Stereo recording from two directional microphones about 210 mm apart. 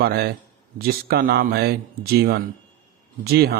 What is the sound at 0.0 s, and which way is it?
A man's voice, 50° right (ahead or behind).